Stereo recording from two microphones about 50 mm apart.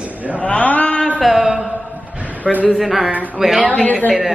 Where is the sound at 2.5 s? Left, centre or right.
Centre.